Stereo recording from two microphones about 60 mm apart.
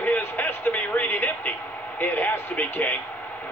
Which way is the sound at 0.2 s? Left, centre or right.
Left.